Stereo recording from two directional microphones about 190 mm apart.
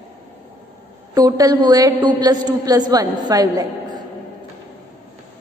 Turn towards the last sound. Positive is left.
turn(degrees=-20)  # may be behind; listen again after turning